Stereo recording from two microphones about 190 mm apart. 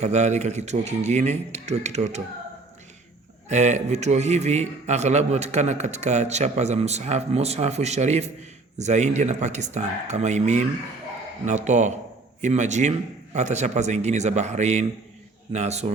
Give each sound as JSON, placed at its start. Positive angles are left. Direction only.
{"t": 0.0, "sound": "a man's voice", "side_deg": -35}
{"t": 3.5, "sound": "a man's voice", "side_deg": -40}